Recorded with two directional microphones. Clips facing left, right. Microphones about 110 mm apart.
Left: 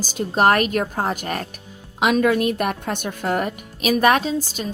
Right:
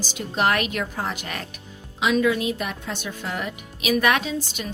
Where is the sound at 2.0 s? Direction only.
55° left (ahead or behind).